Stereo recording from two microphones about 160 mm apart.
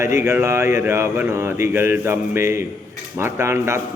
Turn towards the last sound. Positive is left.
turn(degrees=-15)  # may be behind; listen again after turning